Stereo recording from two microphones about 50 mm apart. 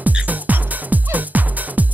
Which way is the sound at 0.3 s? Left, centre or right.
Right.